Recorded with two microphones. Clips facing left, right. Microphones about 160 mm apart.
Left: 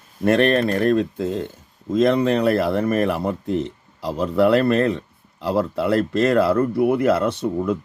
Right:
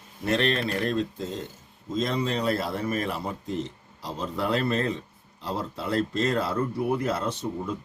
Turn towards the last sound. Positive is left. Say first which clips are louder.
# left 8 dB
turn(degrees=65)  # may be behind; listen again after turning